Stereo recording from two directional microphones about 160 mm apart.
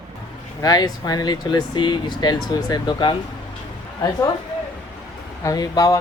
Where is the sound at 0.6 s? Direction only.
25° left (ahead or behind).